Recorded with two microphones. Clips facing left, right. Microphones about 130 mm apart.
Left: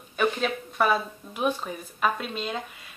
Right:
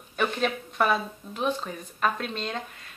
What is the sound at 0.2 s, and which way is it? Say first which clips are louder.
Speech: left 1 dB; centre (ahead or behind).